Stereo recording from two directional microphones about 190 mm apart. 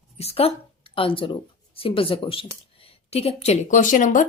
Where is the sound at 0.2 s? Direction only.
30° left (ahead or behind).